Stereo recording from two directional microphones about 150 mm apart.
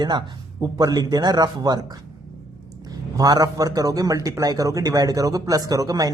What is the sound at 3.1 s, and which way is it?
Speech, 25° right (ahead or behind).